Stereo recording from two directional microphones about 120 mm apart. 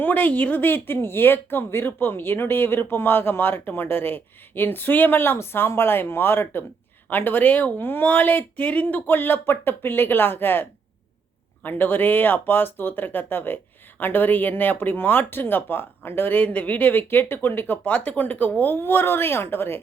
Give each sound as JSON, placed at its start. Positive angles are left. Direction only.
{"t": 0.0, "sound": "speech", "side_deg": 15}